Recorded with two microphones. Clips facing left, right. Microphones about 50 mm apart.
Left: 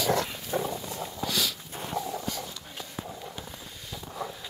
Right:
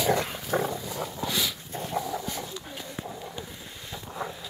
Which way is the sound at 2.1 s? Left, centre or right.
Centre.